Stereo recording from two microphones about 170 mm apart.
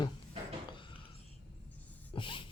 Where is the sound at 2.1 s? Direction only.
30° left (ahead or behind).